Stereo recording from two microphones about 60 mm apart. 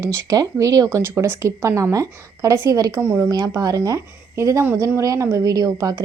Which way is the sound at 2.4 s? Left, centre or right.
Right.